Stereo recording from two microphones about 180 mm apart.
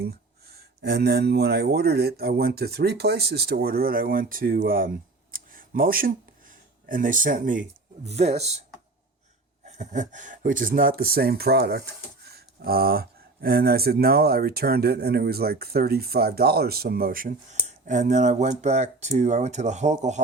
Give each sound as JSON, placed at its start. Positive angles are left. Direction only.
{"t": 0.4, "sound": "speech", "side_deg": -60}
{"t": 5.3, "sound": "a sound", "side_deg": -50}
{"t": 8.0, "sound": "speech", "side_deg": -35}
{"t": 9.6, "sound": "speech", "side_deg": -40}